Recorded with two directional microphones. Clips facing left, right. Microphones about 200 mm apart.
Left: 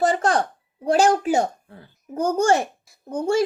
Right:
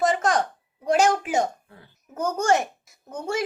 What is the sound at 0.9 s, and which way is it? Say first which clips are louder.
A child's voice: left 3 dB; 30° left (ahead or behind).